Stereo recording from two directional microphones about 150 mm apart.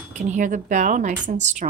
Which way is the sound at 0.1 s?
50° right (ahead or behind).